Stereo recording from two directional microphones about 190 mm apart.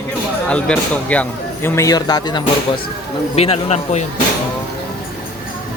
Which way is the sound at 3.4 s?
35° left (ahead or behind).